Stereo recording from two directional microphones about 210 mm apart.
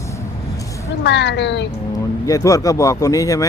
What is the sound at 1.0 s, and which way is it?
Speech, 55° left (ahead or behind).